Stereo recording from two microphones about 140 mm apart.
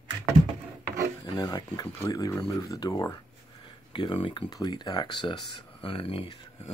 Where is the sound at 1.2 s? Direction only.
30° left (ahead or behind).